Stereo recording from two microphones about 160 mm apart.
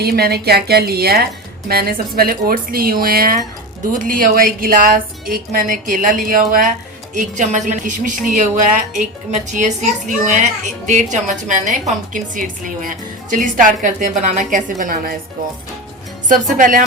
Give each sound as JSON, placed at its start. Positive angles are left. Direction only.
{"t": 0.0, "sound": "a woman's voice", "side_deg": -75}
{"t": 16.3, "sound": "a woman's voice", "side_deg": -55}